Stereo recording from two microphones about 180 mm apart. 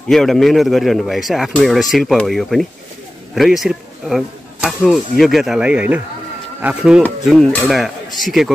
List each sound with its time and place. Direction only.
0.1 s speech: centre (ahead or behind)